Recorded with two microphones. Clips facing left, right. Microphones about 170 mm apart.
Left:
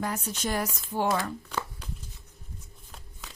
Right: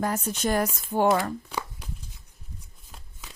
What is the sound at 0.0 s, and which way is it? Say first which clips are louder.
A woman's voice: right 5 dB; 50° right (ahead or behind).